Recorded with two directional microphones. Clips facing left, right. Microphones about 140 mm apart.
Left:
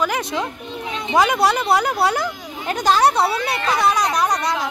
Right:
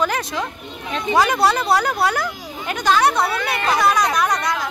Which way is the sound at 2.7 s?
40° left (ahead or behind).